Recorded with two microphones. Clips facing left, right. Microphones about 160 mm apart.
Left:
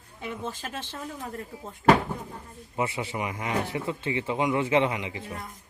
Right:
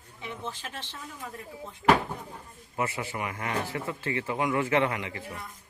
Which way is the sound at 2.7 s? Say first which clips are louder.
Left 2 dB; 20° left (ahead or behind).